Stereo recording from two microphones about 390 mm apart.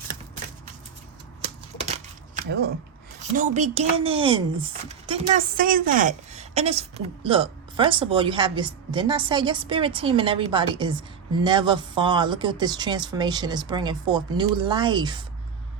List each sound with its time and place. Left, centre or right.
3.3 s speech: centre